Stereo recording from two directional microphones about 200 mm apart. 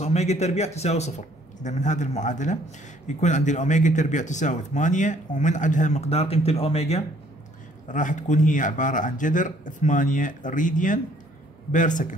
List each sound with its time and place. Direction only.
0.0 s speech: 35° left (ahead or behind)